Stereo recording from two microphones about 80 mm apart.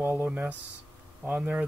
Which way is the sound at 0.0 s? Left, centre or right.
Right.